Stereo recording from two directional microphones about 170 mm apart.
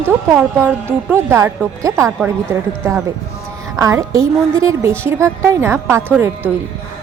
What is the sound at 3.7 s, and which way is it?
A woman's voice, 20° right (ahead or behind).